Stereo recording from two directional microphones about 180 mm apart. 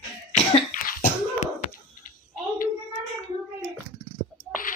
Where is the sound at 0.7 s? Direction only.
50° left (ahead or behind).